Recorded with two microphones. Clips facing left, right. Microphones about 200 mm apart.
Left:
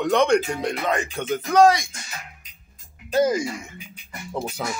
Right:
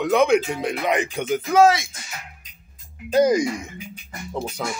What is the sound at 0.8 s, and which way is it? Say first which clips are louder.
Speech: right 2 dB; 15° right (ahead or behind).